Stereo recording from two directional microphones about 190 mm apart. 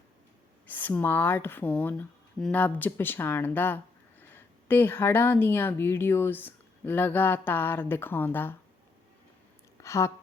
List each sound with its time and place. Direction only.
0.7 s speech: 10° left (ahead or behind)
9.8 s a woman's voice: 15° left (ahead or behind)